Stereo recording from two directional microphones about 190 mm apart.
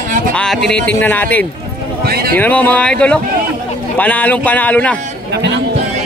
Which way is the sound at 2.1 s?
55° right (ahead or behind).